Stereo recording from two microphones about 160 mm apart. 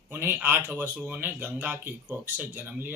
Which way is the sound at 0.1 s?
10° right (ahead or behind).